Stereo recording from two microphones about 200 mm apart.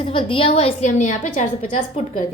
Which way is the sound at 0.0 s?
25° left (ahead or behind).